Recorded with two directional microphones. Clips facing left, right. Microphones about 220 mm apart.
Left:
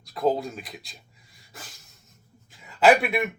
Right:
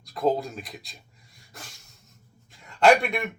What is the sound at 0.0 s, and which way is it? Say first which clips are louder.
Speech: even; centre (ahead or behind).